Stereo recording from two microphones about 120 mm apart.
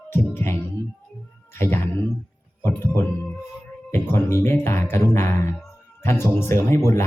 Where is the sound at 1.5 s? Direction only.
20° left (ahead or behind).